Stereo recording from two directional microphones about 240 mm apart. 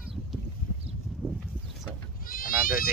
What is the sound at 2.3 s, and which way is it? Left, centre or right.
Goat, left.